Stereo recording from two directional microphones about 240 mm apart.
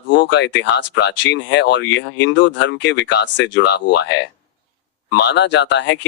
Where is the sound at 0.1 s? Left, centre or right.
Left.